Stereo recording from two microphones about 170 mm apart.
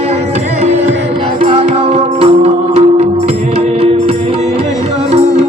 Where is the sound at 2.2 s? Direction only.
35° right (ahead or behind).